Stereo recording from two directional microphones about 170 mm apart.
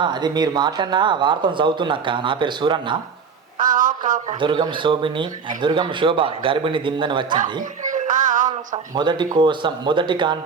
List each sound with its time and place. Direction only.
0.0 s speech: 25° right (ahead or behind)
3.6 s a sound: 50° right (ahead or behind)
4.3 s speech: 30° right (ahead or behind)
7.6 s music: 50° right (ahead or behind)
8.4 s speech: 25° right (ahead or behind)